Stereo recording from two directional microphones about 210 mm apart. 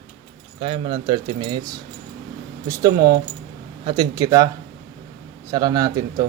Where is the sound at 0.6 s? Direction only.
25° right (ahead or behind).